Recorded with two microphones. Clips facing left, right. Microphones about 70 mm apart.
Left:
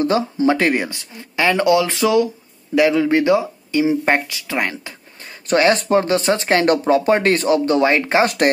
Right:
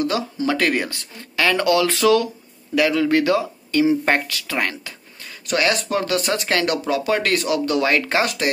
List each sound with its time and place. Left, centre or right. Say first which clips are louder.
0.0 s speech: left 5 dB; left